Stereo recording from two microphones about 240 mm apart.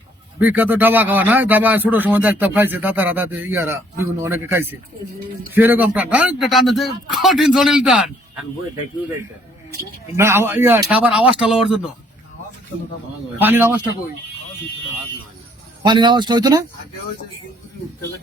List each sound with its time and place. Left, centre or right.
0.3 s speech: centre
10.2 s speech: centre
13.4 s speech: centre
15.8 s speech: centre